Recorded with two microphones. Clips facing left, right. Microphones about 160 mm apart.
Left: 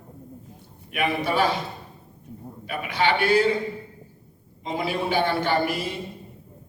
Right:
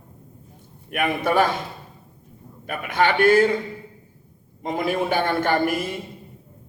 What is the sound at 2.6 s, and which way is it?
Speech, 50° right (ahead or behind).